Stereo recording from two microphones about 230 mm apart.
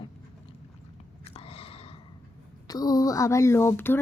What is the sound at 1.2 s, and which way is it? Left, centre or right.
Biting, left.